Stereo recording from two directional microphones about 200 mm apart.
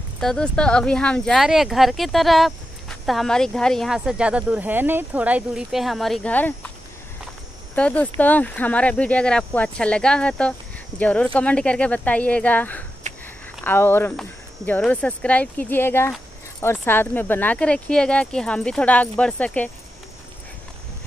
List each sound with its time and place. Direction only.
0.2 s speech: 5° left (ahead or behind)
7.7 s speech: 5° left (ahead or behind)
13.0 s a sound: 35° right (ahead or behind)
13.7 s speech: 10° left (ahead or behind)